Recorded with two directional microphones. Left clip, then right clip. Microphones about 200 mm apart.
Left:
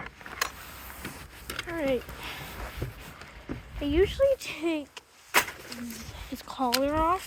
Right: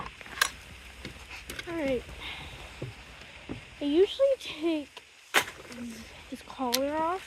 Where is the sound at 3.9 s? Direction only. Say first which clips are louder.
Even; 20° right (ahead or behind).